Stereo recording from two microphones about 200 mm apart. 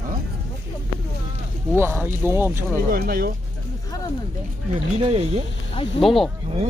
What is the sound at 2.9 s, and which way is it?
Speech, 45° right (ahead or behind).